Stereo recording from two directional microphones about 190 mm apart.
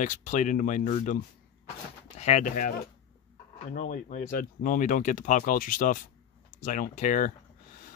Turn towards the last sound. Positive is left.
turn(degrees=45)  # may be behind; listen again after turning